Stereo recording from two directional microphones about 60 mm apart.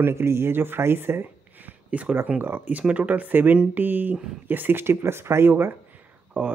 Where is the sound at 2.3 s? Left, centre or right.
Right.